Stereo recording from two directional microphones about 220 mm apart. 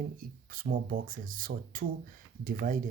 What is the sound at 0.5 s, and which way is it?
Speech, 40° right (ahead or behind).